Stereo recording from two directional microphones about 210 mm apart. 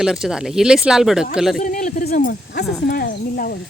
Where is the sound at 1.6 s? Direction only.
35° left (ahead or behind).